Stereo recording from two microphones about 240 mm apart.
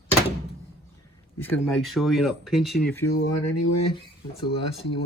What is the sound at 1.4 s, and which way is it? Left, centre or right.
Speech, centre.